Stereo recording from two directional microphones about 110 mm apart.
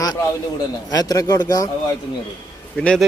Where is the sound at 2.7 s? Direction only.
5° left (ahead or behind).